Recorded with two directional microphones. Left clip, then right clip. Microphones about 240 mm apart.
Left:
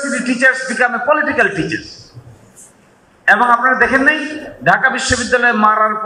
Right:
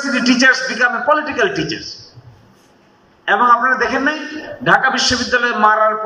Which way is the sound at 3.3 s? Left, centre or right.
Centre.